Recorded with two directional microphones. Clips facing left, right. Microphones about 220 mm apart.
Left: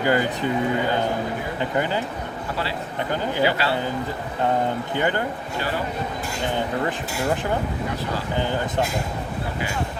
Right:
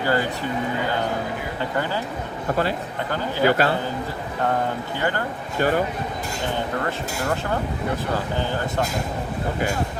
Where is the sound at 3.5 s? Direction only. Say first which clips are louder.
Right 4 dB; 50° right (ahead or behind).